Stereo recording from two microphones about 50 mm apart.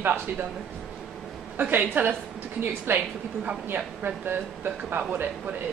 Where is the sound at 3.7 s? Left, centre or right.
Right.